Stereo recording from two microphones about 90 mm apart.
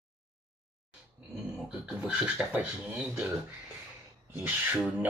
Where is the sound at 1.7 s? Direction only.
10° right (ahead or behind).